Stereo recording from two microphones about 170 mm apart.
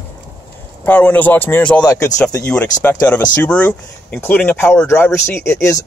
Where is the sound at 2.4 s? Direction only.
5° left (ahead or behind).